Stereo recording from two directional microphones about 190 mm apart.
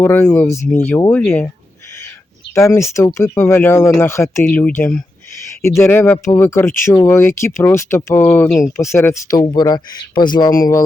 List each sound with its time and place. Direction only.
0.0 s speech: 10° left (ahead or behind)
2.6 s speech: 15° left (ahead or behind)